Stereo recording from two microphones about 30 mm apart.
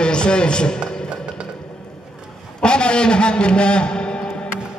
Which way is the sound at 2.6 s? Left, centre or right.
Left.